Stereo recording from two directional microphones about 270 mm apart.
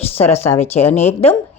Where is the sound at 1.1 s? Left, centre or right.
Left.